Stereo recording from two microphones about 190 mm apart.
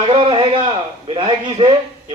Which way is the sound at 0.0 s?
25° right (ahead or behind).